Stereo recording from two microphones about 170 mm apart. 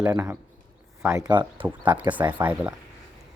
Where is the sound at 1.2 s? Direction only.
25° right (ahead or behind).